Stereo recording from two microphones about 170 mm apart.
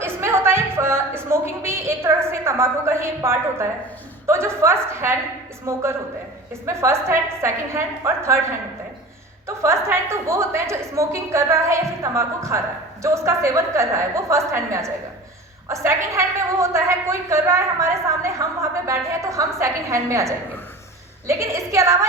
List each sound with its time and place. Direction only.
0.0 s a sound: 15° right (ahead or behind)
4.3 s a woman's voice: 15° right (ahead or behind)
9.6 s a woman's voice: 15° right (ahead or behind)